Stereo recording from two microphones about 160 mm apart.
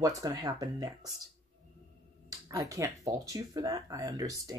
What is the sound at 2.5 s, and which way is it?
Speech, 20° right (ahead or behind).